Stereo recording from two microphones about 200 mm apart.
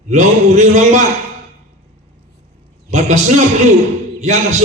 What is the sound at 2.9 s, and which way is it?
Speech, 35° right (ahead or behind).